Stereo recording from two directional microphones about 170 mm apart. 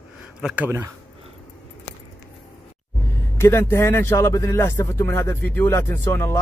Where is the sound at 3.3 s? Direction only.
15° left (ahead or behind).